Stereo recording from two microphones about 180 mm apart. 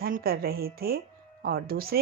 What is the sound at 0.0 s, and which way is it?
Speech, 55° right (ahead or behind).